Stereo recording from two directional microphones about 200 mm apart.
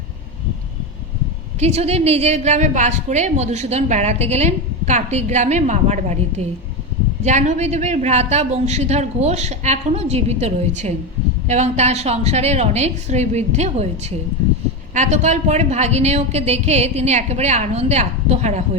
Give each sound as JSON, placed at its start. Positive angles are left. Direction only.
{"t": 1.5, "sound": "a woman's voice", "side_deg": -30}